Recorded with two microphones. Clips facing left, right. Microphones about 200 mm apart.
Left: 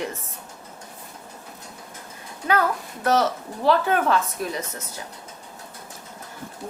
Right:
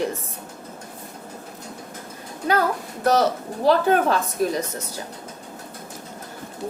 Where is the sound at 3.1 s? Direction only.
35° right (ahead or behind).